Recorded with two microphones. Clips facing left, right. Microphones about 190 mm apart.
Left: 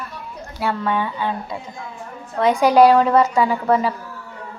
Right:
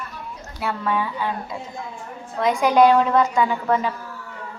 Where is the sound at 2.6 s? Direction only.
35° left (ahead or behind).